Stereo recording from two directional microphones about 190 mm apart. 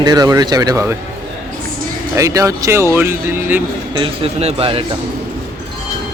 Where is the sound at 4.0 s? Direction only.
30° right (ahead or behind).